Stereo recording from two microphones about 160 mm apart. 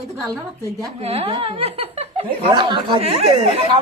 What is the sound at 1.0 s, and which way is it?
Speech, 40° right (ahead or behind).